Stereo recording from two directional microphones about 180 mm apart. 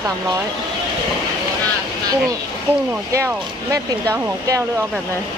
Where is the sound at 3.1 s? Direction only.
15° right (ahead or behind).